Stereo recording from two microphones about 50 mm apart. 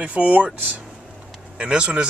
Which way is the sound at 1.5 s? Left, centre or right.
Right.